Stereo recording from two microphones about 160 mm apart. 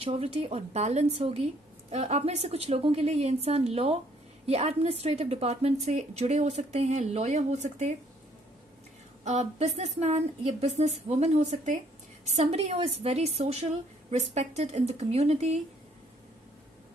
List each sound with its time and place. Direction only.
0.0 s a woman's voice: 35° right (ahead or behind)
9.2 s a woman's voice: 45° right (ahead or behind)